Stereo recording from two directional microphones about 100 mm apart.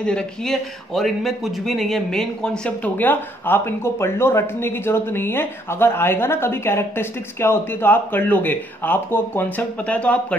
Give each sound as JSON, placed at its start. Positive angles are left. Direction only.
{"t": 0.0, "sound": "a man's voice", "side_deg": 5}